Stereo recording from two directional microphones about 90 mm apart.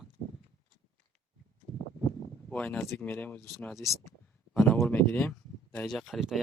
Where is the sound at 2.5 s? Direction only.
15° left (ahead or behind).